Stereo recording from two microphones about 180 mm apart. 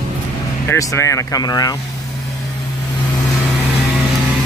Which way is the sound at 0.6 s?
15° left (ahead or behind).